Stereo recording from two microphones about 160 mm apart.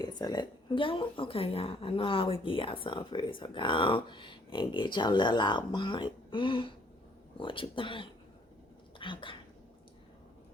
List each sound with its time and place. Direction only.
0.0 s speech: 25° left (ahead or behind)